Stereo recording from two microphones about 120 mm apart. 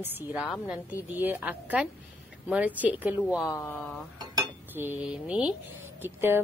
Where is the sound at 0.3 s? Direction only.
5° right (ahead or behind).